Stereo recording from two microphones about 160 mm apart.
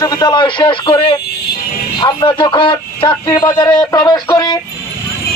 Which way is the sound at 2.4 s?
30° left (ahead or behind).